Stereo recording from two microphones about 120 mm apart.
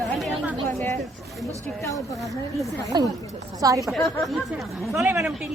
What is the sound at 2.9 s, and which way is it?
Speech, 35° right (ahead or behind).